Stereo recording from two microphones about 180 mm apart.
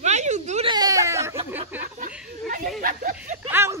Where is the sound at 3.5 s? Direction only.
15° right (ahead or behind).